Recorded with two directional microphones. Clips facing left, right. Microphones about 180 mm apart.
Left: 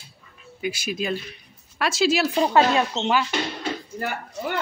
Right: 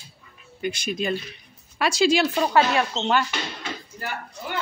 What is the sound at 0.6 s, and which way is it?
Speech, 5° left (ahead or behind).